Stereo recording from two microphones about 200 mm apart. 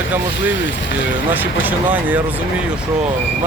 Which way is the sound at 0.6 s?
65° left (ahead or behind).